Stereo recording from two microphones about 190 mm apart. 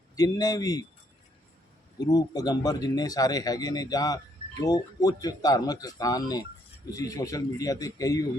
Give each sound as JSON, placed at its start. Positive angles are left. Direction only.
{"t": 0.2, "sound": "speech", "side_deg": 20}
{"t": 2.0, "sound": "a man's voice", "side_deg": 20}